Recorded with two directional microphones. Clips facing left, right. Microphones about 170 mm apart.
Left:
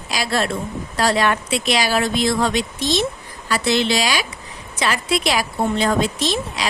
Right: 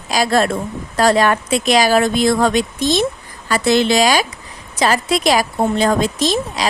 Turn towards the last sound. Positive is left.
turn(degrees=-40)  # may be behind; listen again after turning